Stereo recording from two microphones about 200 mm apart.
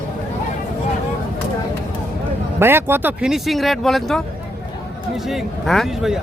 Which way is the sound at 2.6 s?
10° right (ahead or behind).